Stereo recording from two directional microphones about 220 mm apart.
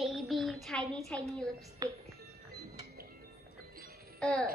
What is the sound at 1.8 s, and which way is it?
Music, 15° right (ahead or behind).